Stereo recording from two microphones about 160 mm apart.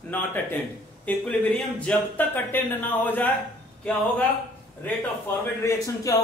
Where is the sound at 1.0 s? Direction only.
10° left (ahead or behind).